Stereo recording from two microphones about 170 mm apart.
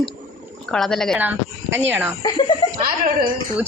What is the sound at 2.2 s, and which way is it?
Speech, 30° left (ahead or behind).